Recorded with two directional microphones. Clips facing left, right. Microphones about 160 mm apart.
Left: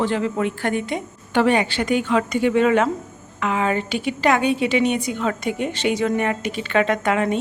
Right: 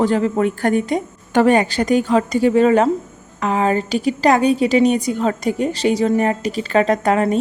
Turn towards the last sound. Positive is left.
turn(degrees=-40)  # may be behind; listen again after turning